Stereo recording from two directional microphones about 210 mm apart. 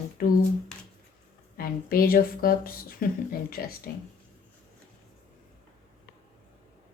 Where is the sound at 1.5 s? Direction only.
45° left (ahead or behind).